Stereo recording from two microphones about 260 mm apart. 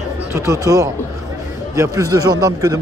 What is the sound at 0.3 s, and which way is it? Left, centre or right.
Speech, centre.